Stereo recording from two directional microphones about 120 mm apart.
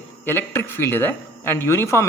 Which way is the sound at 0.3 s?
20° left (ahead or behind).